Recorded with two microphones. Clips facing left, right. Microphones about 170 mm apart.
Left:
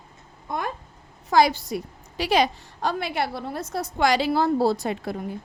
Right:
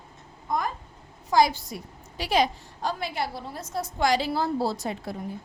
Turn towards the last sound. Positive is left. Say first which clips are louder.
# left 6 dB
turn(degrees=65)  # may be behind; listen again after turning